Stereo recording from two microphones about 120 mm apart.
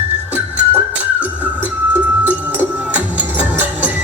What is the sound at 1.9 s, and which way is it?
Music, 10° right (ahead or behind).